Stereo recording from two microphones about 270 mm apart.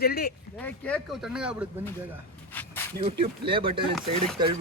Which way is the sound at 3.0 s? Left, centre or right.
Centre.